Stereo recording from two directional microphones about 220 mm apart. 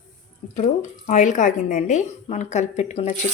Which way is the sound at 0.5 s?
30° left (ahead or behind).